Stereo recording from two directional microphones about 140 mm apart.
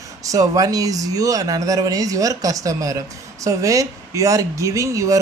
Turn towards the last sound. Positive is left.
turn(degrees=-25)  # may be behind; listen again after turning